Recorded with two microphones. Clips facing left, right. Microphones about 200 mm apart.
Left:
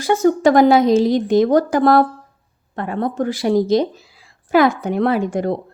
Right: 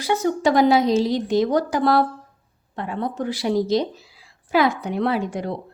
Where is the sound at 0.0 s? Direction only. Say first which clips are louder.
Left 6 dB; 45° left (ahead or behind).